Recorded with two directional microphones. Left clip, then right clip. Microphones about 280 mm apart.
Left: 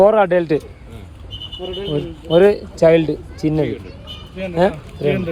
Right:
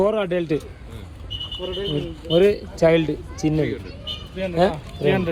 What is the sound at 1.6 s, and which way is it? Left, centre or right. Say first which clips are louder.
Speech: left 4 dB; centre.